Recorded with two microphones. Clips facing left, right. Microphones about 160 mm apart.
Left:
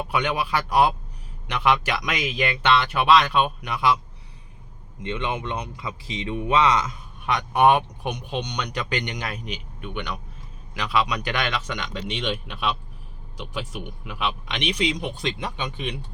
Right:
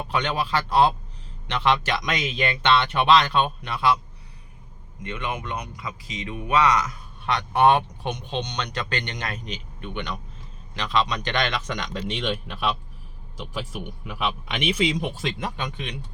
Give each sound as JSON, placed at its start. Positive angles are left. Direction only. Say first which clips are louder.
{"t": 0.1, "sound": "speech", "louder": "even", "side_deg": 10}
{"t": 5.0, "sound": "speech", "louder": "left 3 dB", "side_deg": 25}
{"t": 7.3, "sound": "speech", "louder": "even", "side_deg": 10}